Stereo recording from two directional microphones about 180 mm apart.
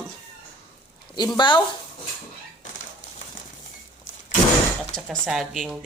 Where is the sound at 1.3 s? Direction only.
25° left (ahead or behind).